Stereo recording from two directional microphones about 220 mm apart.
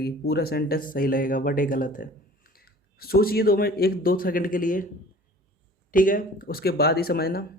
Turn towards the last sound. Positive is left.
turn(degrees=45)  # may be behind; listen again after turning